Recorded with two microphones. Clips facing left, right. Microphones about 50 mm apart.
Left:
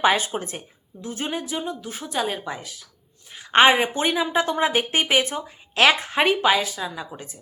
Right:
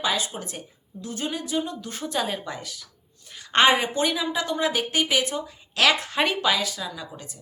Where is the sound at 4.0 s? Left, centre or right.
Left.